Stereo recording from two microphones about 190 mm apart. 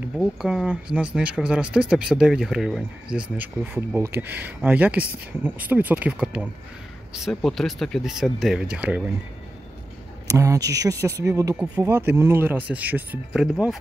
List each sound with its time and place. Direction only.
0.2 s speech: centre (ahead or behind)
10.2 s speech: 15° right (ahead or behind)